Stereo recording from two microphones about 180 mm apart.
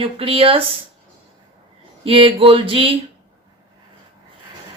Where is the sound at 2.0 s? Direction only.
30° right (ahead or behind).